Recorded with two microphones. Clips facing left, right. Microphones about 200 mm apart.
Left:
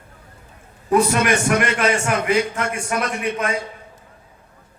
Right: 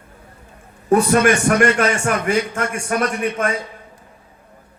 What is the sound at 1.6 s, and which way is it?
A man's voice, 45° right (ahead or behind).